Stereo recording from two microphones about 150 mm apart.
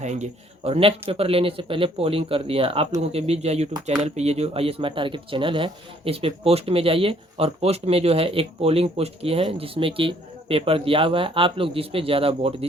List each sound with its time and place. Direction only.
0.0 s a man's voice: 50° right (ahead or behind)